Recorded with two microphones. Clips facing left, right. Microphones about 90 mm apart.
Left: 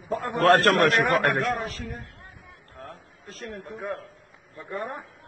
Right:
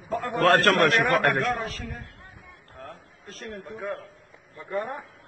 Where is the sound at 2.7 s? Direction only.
Centre (ahead or behind).